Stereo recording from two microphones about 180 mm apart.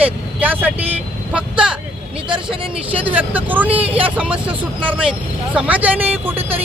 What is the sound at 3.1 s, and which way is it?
Speech, 10° right (ahead or behind).